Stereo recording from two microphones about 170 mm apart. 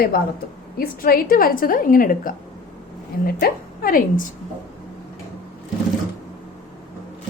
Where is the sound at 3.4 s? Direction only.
60° left (ahead or behind).